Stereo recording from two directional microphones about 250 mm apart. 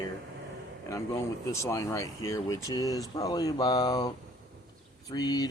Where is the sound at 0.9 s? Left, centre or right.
Centre.